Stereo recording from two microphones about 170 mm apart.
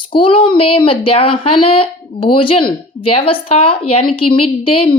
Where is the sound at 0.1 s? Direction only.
30° left (ahead or behind).